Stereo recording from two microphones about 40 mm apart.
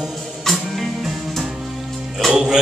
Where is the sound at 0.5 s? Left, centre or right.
Centre.